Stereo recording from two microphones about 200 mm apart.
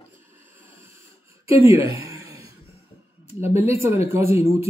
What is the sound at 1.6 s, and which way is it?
Speech, 15° right (ahead or behind).